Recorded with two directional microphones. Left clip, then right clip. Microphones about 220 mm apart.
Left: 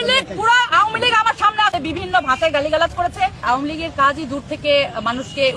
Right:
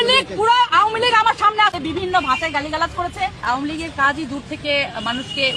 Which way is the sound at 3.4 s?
25° left (ahead or behind).